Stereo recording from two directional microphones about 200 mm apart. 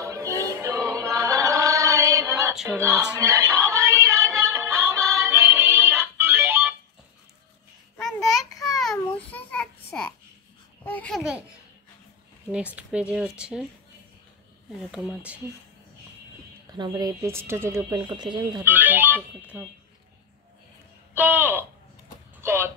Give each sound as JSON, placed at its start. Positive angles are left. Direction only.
{"t": 0.0, "sound": "music", "side_deg": -15}
{"t": 0.6, "sound": "choir", "side_deg": -15}
{"t": 2.5, "sound": "a sound", "side_deg": 0}
{"t": 2.8, "sound": "music", "side_deg": -15}
{"t": 8.0, "sound": "a sound", "side_deg": 0}
{"t": 10.8, "sound": "babbling", "side_deg": 10}
{"t": 12.4, "sound": "speech", "side_deg": -5}
{"t": 14.9, "sound": "speech", "side_deg": 0}
{"t": 16.7, "sound": "speech", "side_deg": -20}
{"t": 21.1, "sound": "speech", "side_deg": -10}
{"t": 22.4, "sound": "a sound", "side_deg": -10}